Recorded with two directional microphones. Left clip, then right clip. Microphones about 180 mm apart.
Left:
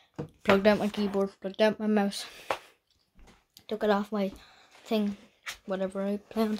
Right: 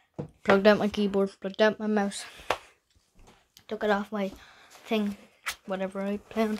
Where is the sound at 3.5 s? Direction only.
20° left (ahead or behind).